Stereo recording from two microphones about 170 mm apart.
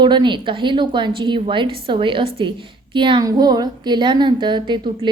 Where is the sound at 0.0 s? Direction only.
25° right (ahead or behind).